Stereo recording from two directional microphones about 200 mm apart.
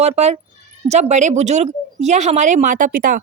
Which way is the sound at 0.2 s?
30° right (ahead or behind).